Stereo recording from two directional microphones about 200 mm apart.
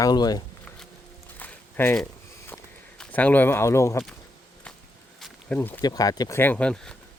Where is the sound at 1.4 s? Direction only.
10° left (ahead or behind).